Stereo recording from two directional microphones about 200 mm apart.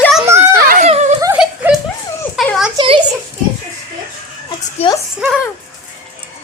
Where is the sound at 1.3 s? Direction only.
5° right (ahead or behind).